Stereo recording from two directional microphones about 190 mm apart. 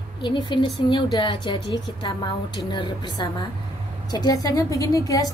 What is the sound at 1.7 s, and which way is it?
A woman's voice, 25° left (ahead or behind).